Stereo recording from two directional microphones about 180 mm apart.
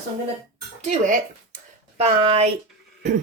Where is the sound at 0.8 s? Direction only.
45° right (ahead or behind).